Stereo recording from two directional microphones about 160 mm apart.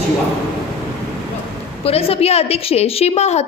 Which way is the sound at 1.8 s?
40° left (ahead or behind).